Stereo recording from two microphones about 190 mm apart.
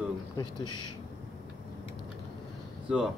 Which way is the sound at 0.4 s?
25° left (ahead or behind).